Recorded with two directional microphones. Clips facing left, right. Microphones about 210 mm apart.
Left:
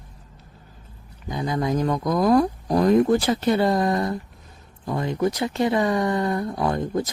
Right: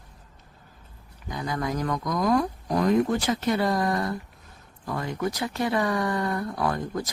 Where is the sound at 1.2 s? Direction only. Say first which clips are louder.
Left 5 dB; 25° left (ahead or behind).